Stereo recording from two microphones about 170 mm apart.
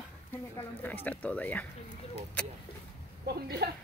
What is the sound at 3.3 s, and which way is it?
Speech, 70° right (ahead or behind).